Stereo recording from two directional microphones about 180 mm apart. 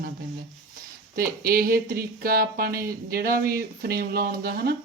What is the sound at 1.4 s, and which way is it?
Speech, 55° right (ahead or behind).